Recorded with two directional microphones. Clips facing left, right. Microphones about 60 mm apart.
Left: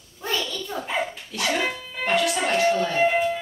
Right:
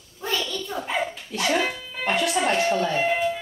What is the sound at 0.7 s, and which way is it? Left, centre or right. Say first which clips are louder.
Dog: even; centre.